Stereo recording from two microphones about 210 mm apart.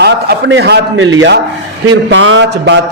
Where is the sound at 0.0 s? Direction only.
55° right (ahead or behind).